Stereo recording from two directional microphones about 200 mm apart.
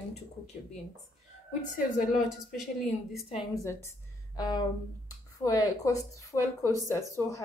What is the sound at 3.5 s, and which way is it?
A woman's voice, 15° left (ahead or behind).